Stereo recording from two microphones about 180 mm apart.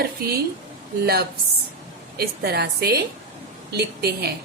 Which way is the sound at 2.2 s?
65° right (ahead or behind).